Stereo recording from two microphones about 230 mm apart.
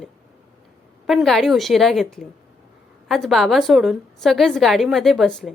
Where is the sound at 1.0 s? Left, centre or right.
Centre.